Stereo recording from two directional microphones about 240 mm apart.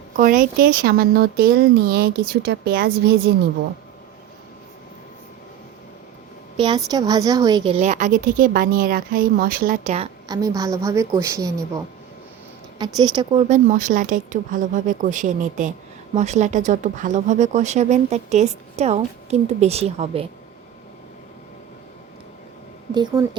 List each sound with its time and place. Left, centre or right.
0.2 s a woman's voice: right
6.6 s a woman's voice: centre
10.2 s a woman's voice: centre
12.8 s a woman's voice: centre
13.5 s a woman's voice: right
23.0 s a woman's voice: centre